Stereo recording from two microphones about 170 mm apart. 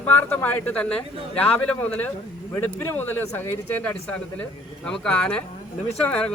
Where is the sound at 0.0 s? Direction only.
10° left (ahead or behind).